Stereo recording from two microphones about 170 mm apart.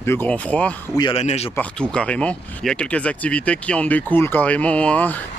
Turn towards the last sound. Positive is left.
turn(degrees=10)  # may be behind; listen again after turning